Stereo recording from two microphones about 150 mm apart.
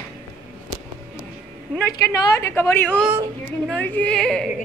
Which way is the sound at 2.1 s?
20° left (ahead or behind).